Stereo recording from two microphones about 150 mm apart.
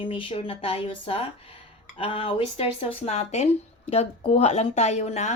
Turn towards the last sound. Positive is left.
turn(degrees=50)  # may be behind; listen again after turning